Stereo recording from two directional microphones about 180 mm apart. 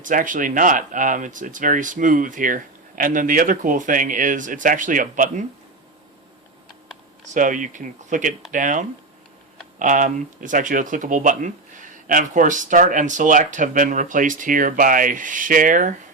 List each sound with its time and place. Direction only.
0.0 s speech: 45° right (ahead or behind)
7.3 s speech: 45° right (ahead or behind)